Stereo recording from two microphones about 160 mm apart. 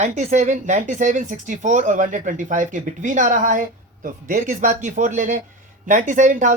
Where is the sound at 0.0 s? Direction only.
45° right (ahead or behind).